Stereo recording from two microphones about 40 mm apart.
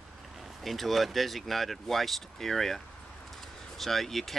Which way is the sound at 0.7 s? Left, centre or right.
Centre.